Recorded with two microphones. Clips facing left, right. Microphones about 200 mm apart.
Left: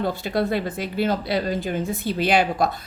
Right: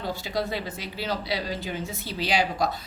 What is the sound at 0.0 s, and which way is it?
A woman's voice, 55° left (ahead or behind).